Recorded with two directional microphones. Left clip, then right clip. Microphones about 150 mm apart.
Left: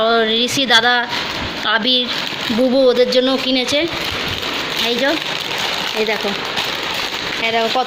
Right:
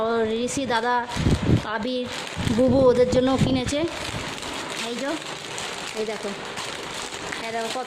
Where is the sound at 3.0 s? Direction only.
40° right (ahead or behind).